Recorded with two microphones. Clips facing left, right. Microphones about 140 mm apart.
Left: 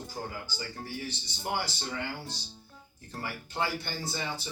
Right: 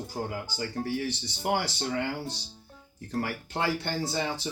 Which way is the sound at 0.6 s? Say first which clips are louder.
Right 10 dB; 75° right (ahead or behind).